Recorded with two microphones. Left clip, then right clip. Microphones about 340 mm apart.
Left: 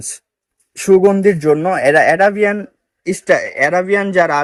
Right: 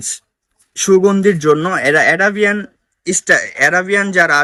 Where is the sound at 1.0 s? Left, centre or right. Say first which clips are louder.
Even; centre.